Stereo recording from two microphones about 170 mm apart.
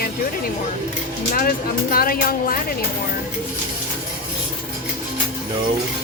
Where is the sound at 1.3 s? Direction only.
55° left (ahead or behind).